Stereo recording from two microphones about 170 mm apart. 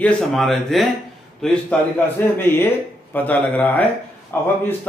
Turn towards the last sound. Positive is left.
turn(degrees=10)  # may be behind; listen again after turning